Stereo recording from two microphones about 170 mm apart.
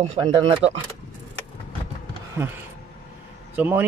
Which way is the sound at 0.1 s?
30° right (ahead or behind).